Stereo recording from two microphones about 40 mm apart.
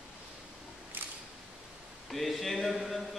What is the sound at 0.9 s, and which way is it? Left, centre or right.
Camera, right.